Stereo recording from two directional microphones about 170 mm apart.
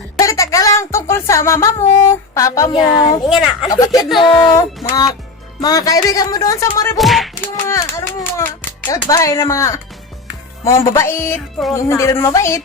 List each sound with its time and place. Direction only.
0.2 s music: 20° left (ahead or behind)
3.2 s speech: centre (ahead or behind)
3.7 s speech: 20° left (ahead or behind)
6.9 s speech: centre (ahead or behind)
7.4 s a sound: 15° left (ahead or behind)
8.9 s speech: 20° left (ahead or behind)